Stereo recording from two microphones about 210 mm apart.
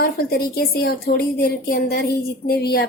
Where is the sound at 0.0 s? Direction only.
50° left (ahead or behind).